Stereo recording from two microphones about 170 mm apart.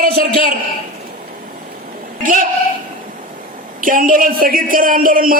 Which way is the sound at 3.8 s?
55° right (ahead or behind).